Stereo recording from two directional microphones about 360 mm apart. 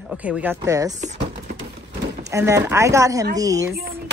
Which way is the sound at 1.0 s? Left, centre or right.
Centre.